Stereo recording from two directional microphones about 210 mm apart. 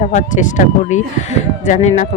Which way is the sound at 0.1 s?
35° left (ahead or behind).